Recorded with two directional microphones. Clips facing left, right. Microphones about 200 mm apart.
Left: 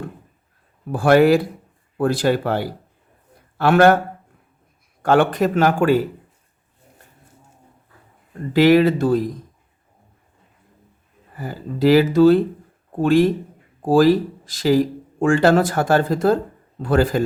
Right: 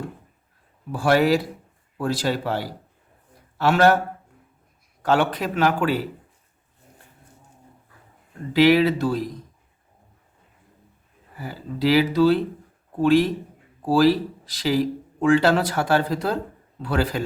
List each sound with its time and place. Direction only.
0.9 s speech: 55° left (ahead or behind)
5.0 s speech: 50° left (ahead or behind)
8.5 s speech: 50° left (ahead or behind)
11.3 s speech: 45° left (ahead or behind)